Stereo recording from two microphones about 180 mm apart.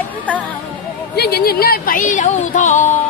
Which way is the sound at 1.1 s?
60° left (ahead or behind).